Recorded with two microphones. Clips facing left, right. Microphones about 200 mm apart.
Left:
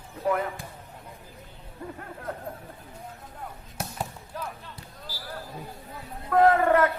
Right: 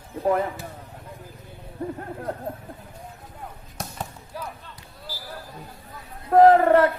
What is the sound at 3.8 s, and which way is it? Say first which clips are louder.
Basketball bounce: even; 5° left (ahead or behind).